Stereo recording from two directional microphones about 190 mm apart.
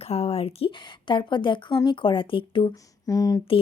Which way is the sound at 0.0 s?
30° left (ahead or behind).